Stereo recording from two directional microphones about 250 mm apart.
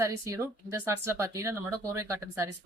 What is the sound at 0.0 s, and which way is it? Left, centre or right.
Speech, centre.